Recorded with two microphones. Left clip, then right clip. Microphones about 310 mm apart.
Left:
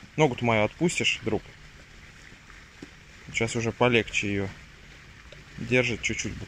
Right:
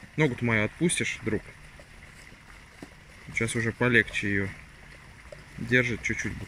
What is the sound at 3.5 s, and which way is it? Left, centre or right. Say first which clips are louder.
Speech: even; left.